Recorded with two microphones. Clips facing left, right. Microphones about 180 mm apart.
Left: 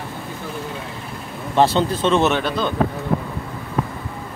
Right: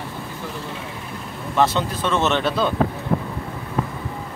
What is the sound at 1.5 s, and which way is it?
Speech, 30° left (ahead or behind).